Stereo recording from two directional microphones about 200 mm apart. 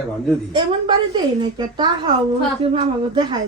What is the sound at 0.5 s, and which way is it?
A woman's voice, 25° right (ahead or behind).